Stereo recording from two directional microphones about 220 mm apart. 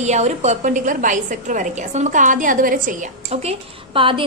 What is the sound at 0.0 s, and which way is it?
A woman's voice, 30° right (ahead or behind).